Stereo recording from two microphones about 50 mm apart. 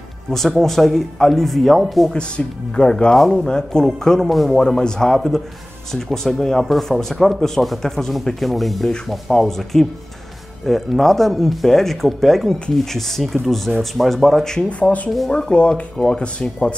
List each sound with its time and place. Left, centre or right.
0.3 s speech: centre
2.1 s speech: centre
3.4 s speech: centre
14.7 s speech: left
15.2 s speech: centre